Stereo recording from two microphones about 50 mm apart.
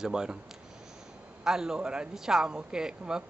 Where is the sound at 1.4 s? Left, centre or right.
Centre.